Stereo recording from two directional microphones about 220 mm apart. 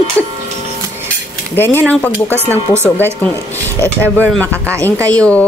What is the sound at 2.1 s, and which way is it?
Speech, 10° right (ahead or behind).